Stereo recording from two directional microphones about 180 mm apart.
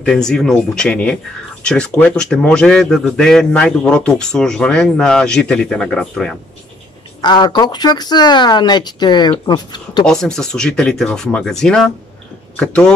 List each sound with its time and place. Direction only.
0.0 s speech: 5° left (ahead or behind)
7.2 s speech: 25° left (ahead or behind)
10.0 s speech: 5° left (ahead or behind)